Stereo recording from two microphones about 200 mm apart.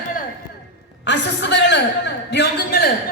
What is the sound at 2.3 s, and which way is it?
Speech, 50° left (ahead or behind).